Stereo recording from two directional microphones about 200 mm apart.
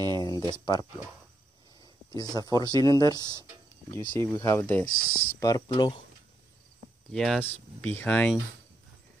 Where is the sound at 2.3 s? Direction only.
20° left (ahead or behind).